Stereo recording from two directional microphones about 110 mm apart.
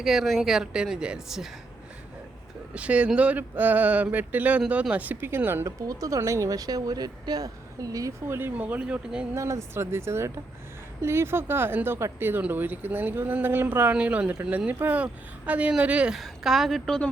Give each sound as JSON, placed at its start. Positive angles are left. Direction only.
{"t": 0.0, "sound": "a woman's voice", "side_deg": 0}
{"t": 2.7, "sound": "speech", "side_deg": -10}
{"t": 5.9, "sound": "speech", "side_deg": -30}
{"t": 8.4, "sound": "speech", "side_deg": -15}
{"t": 9.3, "sound": "speech", "side_deg": -25}